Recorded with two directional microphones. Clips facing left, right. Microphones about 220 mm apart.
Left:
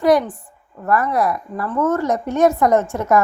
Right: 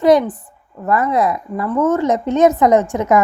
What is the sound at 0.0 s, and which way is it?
A woman's voice, 20° right (ahead or behind).